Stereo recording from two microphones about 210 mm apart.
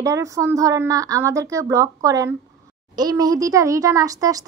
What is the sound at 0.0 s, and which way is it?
A woman's voice, 15° right (ahead or behind).